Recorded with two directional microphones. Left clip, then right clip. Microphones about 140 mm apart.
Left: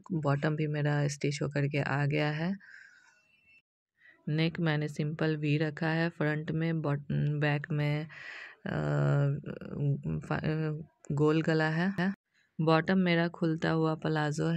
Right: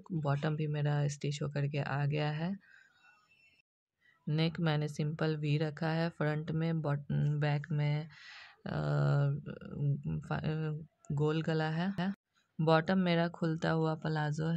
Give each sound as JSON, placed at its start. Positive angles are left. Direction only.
{"t": 0.0, "sound": "speech", "side_deg": 25}
{"t": 4.4, "sound": "speech", "side_deg": 15}
{"t": 7.3, "sound": "speech", "side_deg": 25}
{"t": 12.5, "sound": "speech", "side_deg": 10}
{"t": 13.9, "sound": "speech", "side_deg": 30}